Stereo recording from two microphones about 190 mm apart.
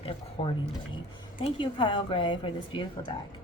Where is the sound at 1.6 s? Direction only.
25° left (ahead or behind).